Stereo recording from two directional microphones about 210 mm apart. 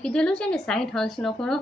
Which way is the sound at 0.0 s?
5° left (ahead or behind).